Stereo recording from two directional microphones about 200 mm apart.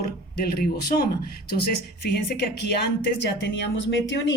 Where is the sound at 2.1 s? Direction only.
55° left (ahead or behind).